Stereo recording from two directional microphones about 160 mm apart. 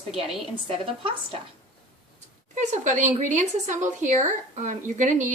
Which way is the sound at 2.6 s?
50° right (ahead or behind).